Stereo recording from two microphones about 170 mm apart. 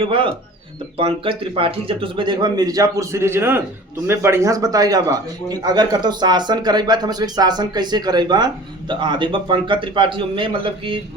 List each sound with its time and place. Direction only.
0.0 s a man's voice: 30° right (ahead or behind)